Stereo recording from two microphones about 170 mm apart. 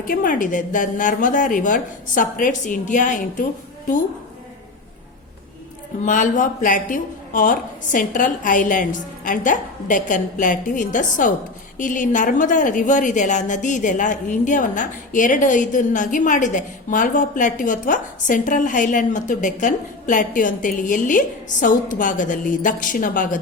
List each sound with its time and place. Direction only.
0.1 s a woman's voice: 55° left (ahead or behind)
6.1 s a woman's voice: 50° left (ahead or behind)